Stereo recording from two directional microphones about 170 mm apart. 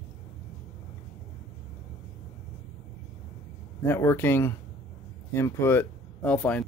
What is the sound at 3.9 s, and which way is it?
Speech, 15° left (ahead or behind).